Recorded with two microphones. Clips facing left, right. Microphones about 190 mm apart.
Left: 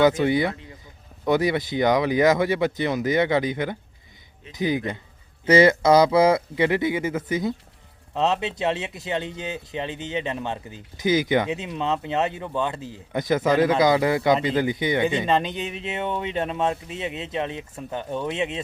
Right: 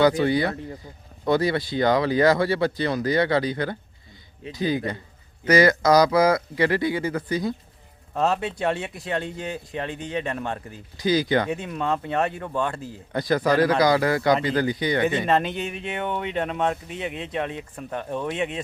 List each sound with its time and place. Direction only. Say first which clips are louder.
0.0 s speech: even; 20° left (ahead or behind)
15.3 s speech: even; centre (ahead or behind)
15.7 s speech: even; 25° left (ahead or behind)